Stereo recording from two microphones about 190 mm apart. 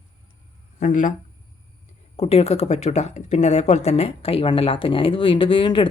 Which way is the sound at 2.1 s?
30° left (ahead or behind).